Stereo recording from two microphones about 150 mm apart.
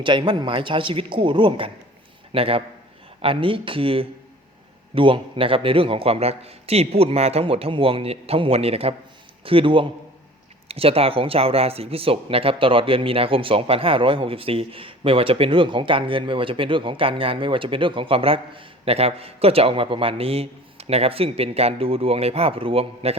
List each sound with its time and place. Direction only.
0.0 s speech: 35° right (ahead or behind)